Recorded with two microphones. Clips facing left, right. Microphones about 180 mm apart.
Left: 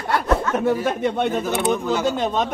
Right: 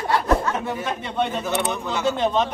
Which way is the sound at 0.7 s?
50° left (ahead or behind).